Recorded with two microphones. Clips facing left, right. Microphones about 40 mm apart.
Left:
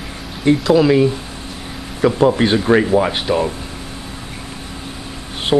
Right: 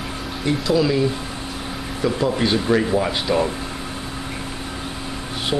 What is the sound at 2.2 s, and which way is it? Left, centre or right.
Speech, left.